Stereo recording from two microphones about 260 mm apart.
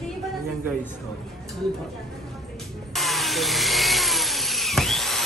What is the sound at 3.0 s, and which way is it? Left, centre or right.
Wood, centre.